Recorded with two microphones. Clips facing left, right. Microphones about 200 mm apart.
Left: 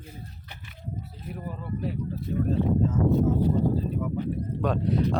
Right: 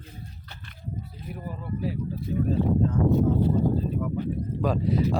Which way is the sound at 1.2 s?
5° right (ahead or behind).